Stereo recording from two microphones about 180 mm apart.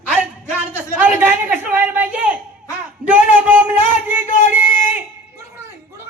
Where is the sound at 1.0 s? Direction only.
10° right (ahead or behind).